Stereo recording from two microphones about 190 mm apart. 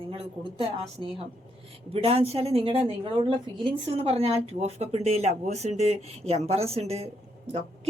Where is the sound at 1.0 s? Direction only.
25° right (ahead or behind).